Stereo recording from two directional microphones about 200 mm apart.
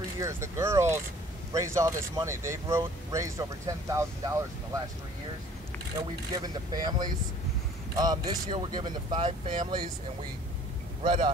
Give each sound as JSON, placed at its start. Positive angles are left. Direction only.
{"t": 0.2, "sound": "speech", "side_deg": -15}
{"t": 5.9, "sound": "speech", "side_deg": -20}
{"t": 11.0, "sound": "speech", "side_deg": -25}